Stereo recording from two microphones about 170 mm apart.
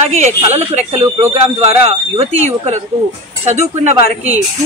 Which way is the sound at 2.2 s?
40° right (ahead or behind).